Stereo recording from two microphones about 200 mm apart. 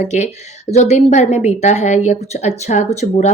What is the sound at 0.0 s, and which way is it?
A woman's voice, 35° left (ahead or behind).